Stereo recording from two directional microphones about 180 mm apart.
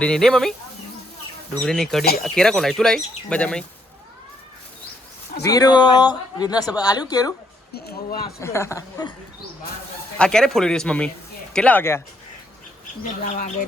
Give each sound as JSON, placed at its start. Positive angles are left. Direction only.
{"t": 0.0, "sound": "speech", "side_deg": 5}
{"t": 1.6, "sound": "speech", "side_deg": 0}
{"t": 5.4, "sound": "a woman's voice", "side_deg": 20}
{"t": 7.7, "sound": "speech", "side_deg": 60}
{"t": 8.4, "sound": "speech", "side_deg": 15}
{"t": 10.2, "sound": "speech", "side_deg": 5}
{"t": 13.2, "sound": "speech", "side_deg": 40}